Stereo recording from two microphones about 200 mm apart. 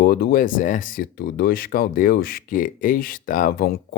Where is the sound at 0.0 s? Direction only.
50° left (ahead or behind).